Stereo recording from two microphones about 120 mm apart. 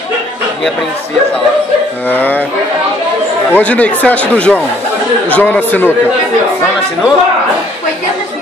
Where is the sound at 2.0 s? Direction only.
15° left (ahead or behind).